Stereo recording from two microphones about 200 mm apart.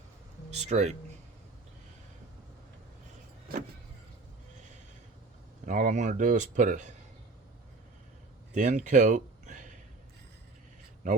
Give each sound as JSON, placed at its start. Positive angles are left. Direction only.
{"t": 0.5, "sound": "speech", "side_deg": -35}
{"t": 5.6, "sound": "speech", "side_deg": -40}
{"t": 8.5, "sound": "speech", "side_deg": -40}